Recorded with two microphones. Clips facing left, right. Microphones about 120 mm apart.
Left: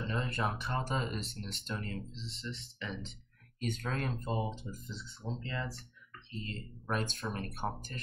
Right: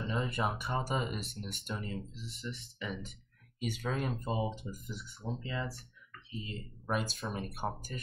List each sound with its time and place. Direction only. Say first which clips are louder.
0.1 s a sound: right 3 dB; 10° right (ahead or behind)
0.4 s speech: right 1 dB; 5° right (ahead or behind)
2.1 s speech: left 1 dB; 25° left (ahead or behind)
2.8 s speech: right 2 dB; 10° right (ahead or behind)
4.7 s speech: right 1 dB; 25° left (ahead or behind)
5.2 s speech: right 1 dB; 15° right (ahead or behind)